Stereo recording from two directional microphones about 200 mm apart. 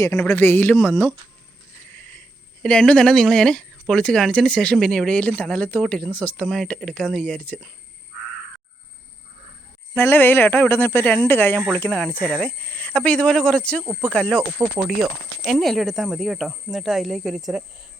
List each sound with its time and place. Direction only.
0.0 s speech: 15° left (ahead or behind)
9.9 s speech: 10° left (ahead or behind)